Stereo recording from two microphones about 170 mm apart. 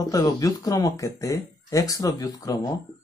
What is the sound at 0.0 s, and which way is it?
Speech, 20° left (ahead or behind).